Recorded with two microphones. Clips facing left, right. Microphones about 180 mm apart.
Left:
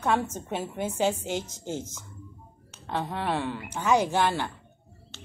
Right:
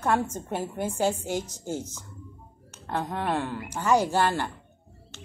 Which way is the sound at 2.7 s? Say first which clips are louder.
Right 1 dB; 10° right (ahead or behind).